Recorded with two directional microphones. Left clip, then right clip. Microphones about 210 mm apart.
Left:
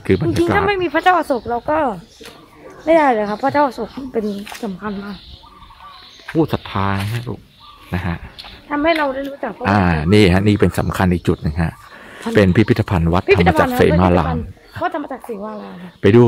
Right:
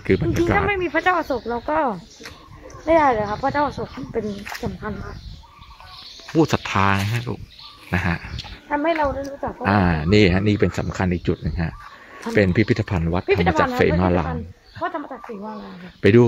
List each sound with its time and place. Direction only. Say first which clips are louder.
0.0 s speech: left 3 dB; 5° left (ahead or behind)
0.4 s a sound: left 4 dB; 5° left (ahead or behind)
0.7 s speech: left 5 dB; 30° left (ahead or behind); by 4.8 s 45° left (ahead or behind)
6.3 s speech: even; 5° right (ahead or behind)
7.9 s a sound: right 2 dB; 5° right (ahead or behind)
8.6 s speech: left 4 dB; 50° left (ahead or behind)
9.6 s speech: left 3 dB; 5° left (ahead or behind); by 13.3 s 20° left (ahead or behind)
13.3 s speech: left 6 dB; 50° left (ahead or behind)
13.7 s speech: left 5 dB; 15° left (ahead or behind)
14.8 s speech: left 5 dB; 50° left (ahead or behind)
16.0 s speech: left 3 dB; 10° left (ahead or behind)